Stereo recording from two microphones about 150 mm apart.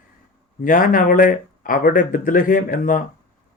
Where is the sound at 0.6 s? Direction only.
65° left (ahead or behind).